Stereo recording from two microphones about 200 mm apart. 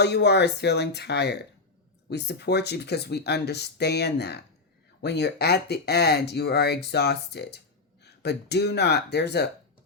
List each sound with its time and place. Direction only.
0.0 s speech: 55° left (ahead or behind)